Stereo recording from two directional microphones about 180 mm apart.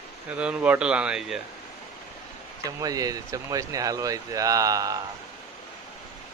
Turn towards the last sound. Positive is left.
turn(degrees=-20)  # may be behind; listen again after turning